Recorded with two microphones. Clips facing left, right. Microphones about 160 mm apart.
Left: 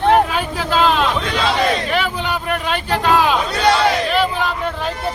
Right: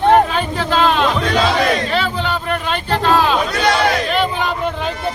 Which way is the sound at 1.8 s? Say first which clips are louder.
Right 1 dB; 15° left (ahead or behind).